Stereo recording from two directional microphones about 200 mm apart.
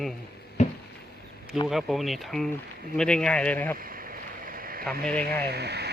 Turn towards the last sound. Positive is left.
turn(degrees=-55)  # may be behind; listen again after turning